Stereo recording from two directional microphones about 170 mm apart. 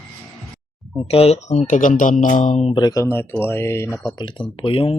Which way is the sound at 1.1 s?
35° left (ahead or behind).